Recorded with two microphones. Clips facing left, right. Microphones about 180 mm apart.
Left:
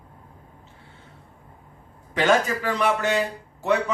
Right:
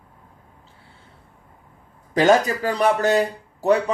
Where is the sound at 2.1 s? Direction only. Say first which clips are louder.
Right 4 dB; 40° right (ahead or behind).